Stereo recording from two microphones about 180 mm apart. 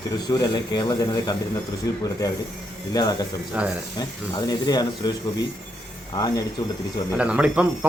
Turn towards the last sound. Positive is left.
turn(degrees=-10)  # may be behind; listen again after turning